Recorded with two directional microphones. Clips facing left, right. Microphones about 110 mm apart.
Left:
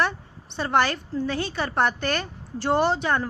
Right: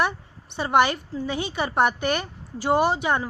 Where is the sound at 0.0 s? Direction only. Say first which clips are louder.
Right 1 dB; 15° right (ahead or behind).